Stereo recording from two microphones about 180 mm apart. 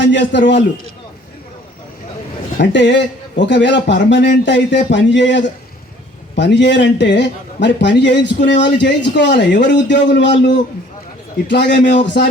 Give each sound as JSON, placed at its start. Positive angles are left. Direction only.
{"t": 0.0, "sound": "a man's voice", "side_deg": 80}
{"t": 2.6, "sound": "a man's voice", "side_deg": 80}